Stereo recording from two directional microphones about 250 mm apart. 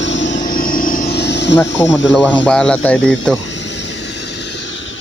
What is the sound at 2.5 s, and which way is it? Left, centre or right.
Speech, centre.